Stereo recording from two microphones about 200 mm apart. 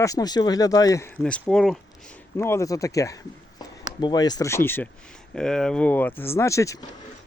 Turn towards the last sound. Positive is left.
turn(degrees=15)  # may be behind; listen again after turning